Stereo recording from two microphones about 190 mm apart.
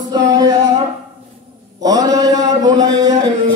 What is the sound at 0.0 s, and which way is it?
Music, 20° right (ahead or behind).